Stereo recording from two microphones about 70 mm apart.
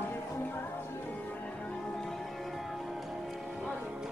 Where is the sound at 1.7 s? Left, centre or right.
Centre.